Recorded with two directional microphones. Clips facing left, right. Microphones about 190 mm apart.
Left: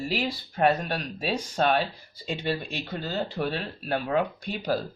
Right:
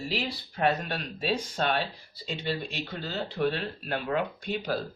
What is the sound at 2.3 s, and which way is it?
Speech, 45° left (ahead or behind).